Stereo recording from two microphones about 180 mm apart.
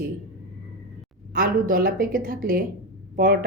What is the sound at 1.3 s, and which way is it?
A woman's voice, 50° right (ahead or behind).